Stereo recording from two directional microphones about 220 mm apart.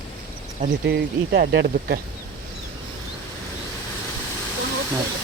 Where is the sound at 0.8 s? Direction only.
45° right (ahead or behind).